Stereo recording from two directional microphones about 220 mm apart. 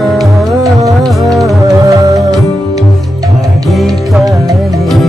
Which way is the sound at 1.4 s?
15° right (ahead or behind).